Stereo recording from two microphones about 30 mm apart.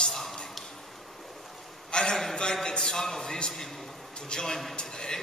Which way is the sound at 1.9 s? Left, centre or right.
Centre.